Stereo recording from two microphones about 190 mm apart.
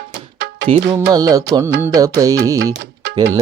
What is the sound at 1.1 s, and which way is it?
Music, 20° right (ahead or behind).